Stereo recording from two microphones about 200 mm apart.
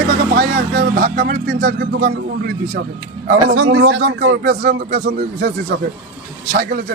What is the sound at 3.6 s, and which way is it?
Speech, 75° right (ahead or behind).